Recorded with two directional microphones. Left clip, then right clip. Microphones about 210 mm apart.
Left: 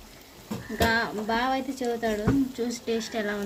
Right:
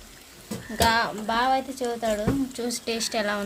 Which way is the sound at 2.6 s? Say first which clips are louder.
Right 1 dB; 45° right (ahead or behind).